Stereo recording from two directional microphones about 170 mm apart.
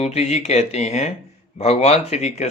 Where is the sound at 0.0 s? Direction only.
40° left (ahead or behind).